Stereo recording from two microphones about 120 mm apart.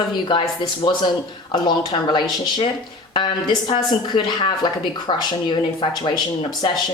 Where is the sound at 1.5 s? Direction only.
40° left (ahead or behind).